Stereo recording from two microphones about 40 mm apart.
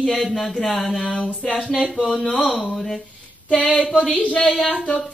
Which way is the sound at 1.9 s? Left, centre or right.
Centre.